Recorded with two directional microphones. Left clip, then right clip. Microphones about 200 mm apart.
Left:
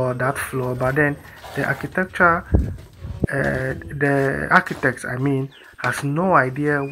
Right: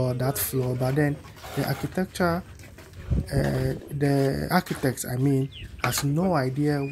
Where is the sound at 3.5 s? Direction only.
50° right (ahead or behind).